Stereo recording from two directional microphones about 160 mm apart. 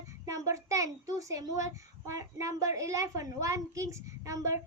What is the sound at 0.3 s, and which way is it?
A child's voice, 20° right (ahead or behind).